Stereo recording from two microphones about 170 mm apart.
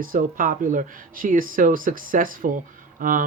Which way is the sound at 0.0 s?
55° right (ahead or behind).